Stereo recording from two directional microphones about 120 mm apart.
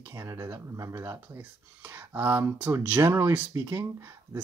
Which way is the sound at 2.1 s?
15° right (ahead or behind).